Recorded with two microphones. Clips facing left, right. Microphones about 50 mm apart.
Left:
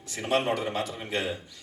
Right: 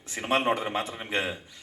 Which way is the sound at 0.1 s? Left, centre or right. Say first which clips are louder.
Right 1 dB; right.